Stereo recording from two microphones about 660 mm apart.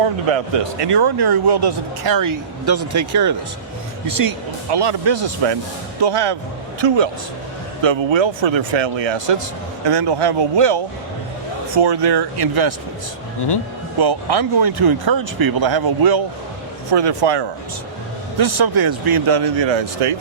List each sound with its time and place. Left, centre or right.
0.5 s speech: right
11.8 s speech: right
14.0 s speech: right